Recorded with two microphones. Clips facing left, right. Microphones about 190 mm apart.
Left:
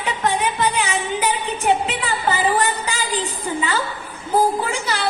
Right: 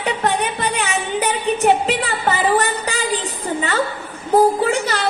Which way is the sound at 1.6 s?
35° right (ahead or behind).